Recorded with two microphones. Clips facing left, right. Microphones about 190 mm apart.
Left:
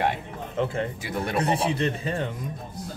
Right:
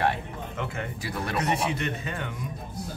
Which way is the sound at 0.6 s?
30° left (ahead or behind).